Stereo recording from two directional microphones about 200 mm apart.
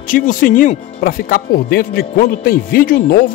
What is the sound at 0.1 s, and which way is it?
Speech, 40° left (ahead or behind).